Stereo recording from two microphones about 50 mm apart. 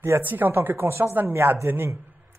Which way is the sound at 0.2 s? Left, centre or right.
Right.